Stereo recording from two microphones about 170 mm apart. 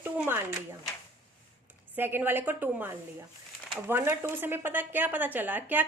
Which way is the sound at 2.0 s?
10° right (ahead or behind).